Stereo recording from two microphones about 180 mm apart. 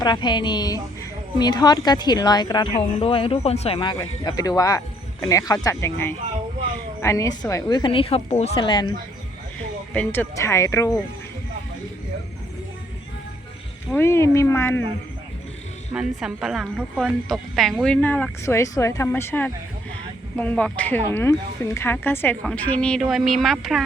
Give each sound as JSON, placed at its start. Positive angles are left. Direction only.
{"t": 0.0, "sound": "speech", "side_deg": 25}
{"t": 9.9, "sound": "speech", "side_deg": 10}
{"t": 13.9, "sound": "speech", "side_deg": 15}
{"t": 15.9, "sound": "a woman's voice", "side_deg": -5}